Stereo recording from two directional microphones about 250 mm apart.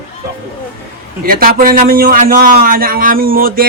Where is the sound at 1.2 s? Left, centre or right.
Right.